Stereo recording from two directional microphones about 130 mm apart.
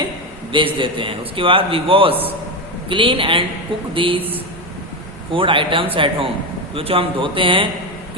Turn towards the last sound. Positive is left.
turn(degrees=-40)  # may be behind; listen again after turning